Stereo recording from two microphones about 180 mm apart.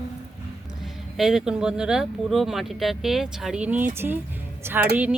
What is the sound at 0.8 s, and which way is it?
Speech, centre (ahead or behind).